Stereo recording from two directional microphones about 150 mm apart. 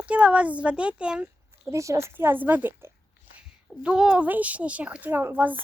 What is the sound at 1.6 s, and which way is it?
A child's voice, 20° right (ahead or behind).